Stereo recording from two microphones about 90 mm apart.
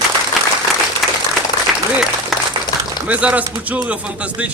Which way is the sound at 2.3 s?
Centre (ahead or behind).